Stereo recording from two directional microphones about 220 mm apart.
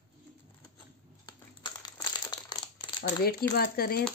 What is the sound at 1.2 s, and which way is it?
Crumpling, 20° left (ahead or behind).